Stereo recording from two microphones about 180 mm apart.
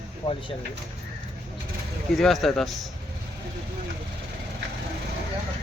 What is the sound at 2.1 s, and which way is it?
Speech, centre (ahead or behind).